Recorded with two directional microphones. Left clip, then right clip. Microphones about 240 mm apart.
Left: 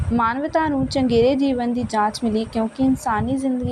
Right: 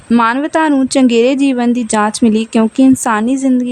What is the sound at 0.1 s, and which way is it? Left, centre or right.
Speech, right.